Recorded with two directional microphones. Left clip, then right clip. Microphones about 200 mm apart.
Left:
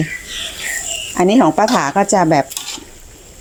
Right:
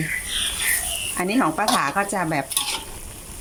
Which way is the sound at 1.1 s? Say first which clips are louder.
Left 10 dB; 35° left (ahead or behind).